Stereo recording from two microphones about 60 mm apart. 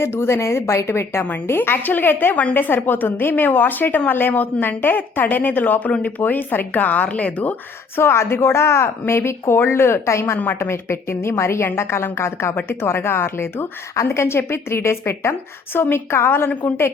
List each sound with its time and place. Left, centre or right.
0.0 s a woman's voice: left
1.5 s a woman's voice: left
7.9 s a woman's voice: left
10.3 s a woman's voice: left
10.6 s a woman's voice: left
13.9 s a woman's voice: left